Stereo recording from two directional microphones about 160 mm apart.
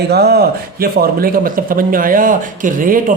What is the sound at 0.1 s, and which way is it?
Speech, 90° right.